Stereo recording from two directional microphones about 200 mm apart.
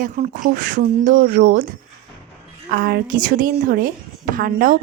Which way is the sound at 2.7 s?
45° right (ahead or behind).